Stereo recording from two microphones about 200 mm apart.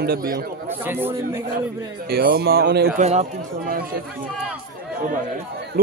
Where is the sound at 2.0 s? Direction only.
50° right (ahead or behind).